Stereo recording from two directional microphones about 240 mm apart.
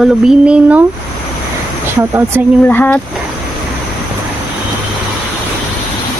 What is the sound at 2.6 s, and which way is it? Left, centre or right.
Speech, centre.